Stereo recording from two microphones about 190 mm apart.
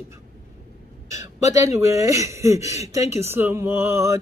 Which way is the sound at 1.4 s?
15° right (ahead or behind).